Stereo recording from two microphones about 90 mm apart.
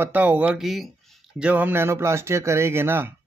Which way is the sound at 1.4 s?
15° right (ahead or behind).